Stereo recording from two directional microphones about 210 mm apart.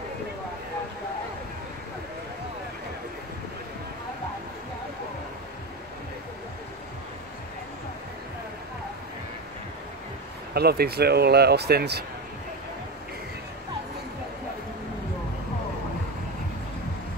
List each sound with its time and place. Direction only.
10.5 s speech: 50° right (ahead or behind)